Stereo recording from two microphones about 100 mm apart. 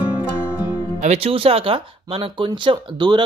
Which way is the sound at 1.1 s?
75° right (ahead or behind).